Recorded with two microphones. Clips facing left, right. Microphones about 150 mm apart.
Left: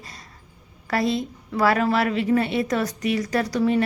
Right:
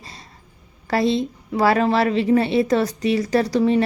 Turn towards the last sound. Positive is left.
turn(degrees=-30)  # may be behind; listen again after turning